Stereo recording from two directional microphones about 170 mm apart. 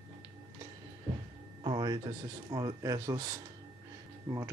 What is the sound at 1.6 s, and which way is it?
Speech, 25° right (ahead or behind).